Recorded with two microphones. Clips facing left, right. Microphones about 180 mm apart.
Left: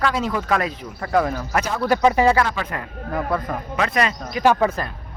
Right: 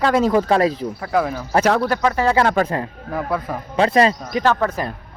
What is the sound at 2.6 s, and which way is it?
Speech, 45° right (ahead or behind).